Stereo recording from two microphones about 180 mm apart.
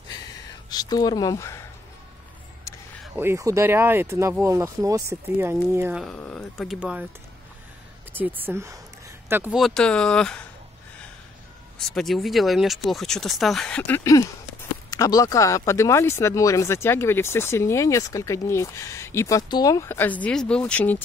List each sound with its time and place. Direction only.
0.7 s speech: 20° left (ahead or behind)
3.2 s speech: 15° right (ahead or behind)
6.0 s speech: 5° left (ahead or behind)
8.5 s speech: 15° right (ahead or behind)
9.6 s speech: 5° left (ahead or behind)
11.9 s speech: centre (ahead or behind)